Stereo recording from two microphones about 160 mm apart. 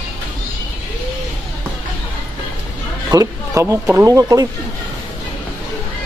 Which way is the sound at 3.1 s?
20° right (ahead or behind).